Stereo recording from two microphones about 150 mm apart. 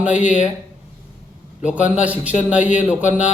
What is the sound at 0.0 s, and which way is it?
Speech, 10° right (ahead or behind).